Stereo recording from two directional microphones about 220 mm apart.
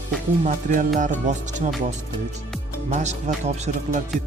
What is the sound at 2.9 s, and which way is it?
Speech, 30° right (ahead or behind).